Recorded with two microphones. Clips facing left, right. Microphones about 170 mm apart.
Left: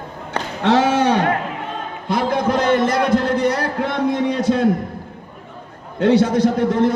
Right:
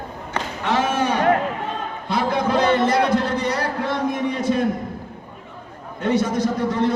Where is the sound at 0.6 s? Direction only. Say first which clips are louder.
Left 6 dB; 80° left.